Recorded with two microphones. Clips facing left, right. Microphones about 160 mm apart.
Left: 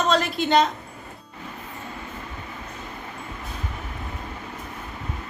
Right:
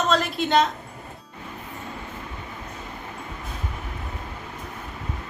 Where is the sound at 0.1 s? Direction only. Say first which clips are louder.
Left 1 dB; centre (ahead or behind).